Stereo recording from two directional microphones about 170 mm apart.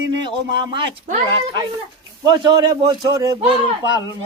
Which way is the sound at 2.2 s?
25° right (ahead or behind).